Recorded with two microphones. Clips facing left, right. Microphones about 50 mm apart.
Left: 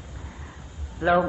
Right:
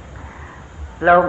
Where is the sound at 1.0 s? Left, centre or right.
Right.